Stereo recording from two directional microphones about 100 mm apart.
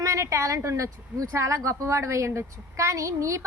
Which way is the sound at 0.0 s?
30° right (ahead or behind).